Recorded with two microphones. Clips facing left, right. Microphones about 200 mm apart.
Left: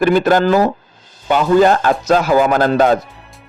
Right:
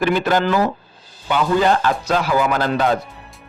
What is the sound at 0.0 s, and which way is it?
A man's voice, 45° left (ahead or behind).